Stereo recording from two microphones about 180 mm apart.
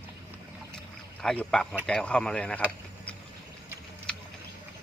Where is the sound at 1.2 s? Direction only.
5° left (ahead or behind).